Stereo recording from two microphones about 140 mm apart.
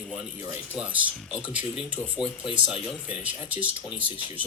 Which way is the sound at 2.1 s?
40° left (ahead or behind).